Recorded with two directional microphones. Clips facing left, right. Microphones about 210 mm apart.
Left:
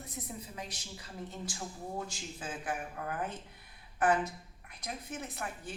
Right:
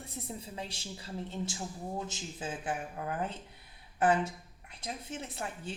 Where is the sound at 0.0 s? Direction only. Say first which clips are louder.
Right 1 dB; 30° right (ahead or behind).